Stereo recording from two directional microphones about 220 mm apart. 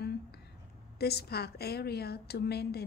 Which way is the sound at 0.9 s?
45° left (ahead or behind).